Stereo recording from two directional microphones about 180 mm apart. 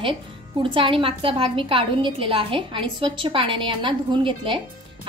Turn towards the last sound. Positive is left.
turn(degrees=-30)  # may be behind; listen again after turning